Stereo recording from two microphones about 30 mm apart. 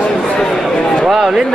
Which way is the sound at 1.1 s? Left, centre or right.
Centre.